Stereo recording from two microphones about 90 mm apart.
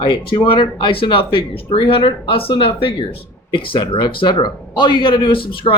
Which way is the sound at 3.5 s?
75° left (ahead or behind).